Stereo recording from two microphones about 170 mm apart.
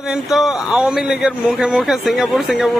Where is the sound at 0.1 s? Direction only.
Centre (ahead or behind).